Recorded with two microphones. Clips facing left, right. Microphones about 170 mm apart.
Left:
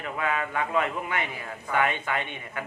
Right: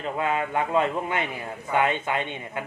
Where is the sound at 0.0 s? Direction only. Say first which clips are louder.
Right 3 dB; 25° right (ahead or behind).